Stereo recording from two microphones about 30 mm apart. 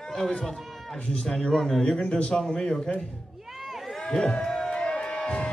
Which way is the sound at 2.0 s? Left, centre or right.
Left.